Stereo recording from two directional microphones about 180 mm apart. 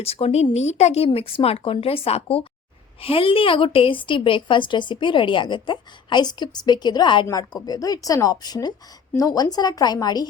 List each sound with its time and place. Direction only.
0.0 s a woman's voice: 35° left (ahead or behind)